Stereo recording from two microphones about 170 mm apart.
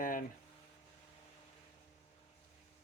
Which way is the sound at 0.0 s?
55° left (ahead or behind).